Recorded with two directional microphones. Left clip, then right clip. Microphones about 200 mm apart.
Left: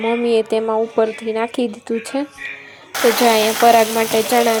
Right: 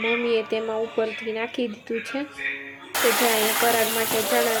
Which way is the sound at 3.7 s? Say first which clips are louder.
Left 9 dB; 50° left (ahead or behind).